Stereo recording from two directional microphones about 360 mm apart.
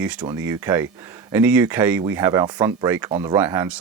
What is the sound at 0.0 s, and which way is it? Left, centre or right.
Speech, centre.